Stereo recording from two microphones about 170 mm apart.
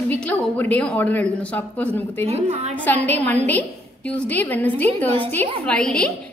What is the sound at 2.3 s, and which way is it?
Speech, 40° right (ahead or behind).